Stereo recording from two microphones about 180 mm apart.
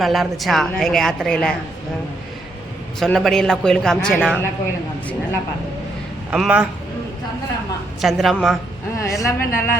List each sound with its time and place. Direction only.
0.0 s a woman's voice: centre (ahead or behind)
3.0 s a woman's voice: centre (ahead or behind)
6.3 s a woman's voice: 5° right (ahead or behind)
8.0 s a woman's voice: centre (ahead or behind)
9.0 s speech: 15° left (ahead or behind)